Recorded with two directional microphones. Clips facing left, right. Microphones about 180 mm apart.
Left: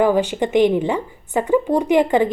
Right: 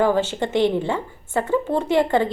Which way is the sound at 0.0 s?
15° left (ahead or behind).